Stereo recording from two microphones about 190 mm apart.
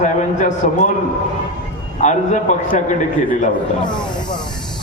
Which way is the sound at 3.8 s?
25° left (ahead or behind).